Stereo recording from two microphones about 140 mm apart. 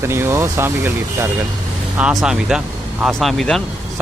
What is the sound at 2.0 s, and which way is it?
Speech, 5° right (ahead or behind).